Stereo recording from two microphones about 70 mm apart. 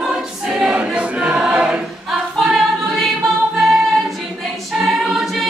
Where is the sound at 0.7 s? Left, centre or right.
Centre.